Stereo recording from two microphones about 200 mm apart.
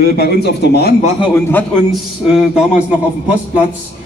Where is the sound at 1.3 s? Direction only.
10° left (ahead or behind); by 3.6 s 5° right (ahead or behind).